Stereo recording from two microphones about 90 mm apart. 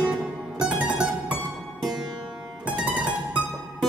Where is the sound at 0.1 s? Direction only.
10° right (ahead or behind).